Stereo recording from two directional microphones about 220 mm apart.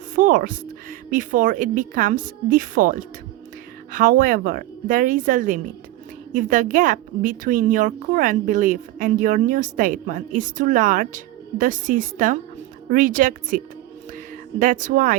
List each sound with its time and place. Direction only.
0.2 s a woman's voice: 40° right (ahead or behind)
14.6 s a woman's voice: 35° right (ahead or behind)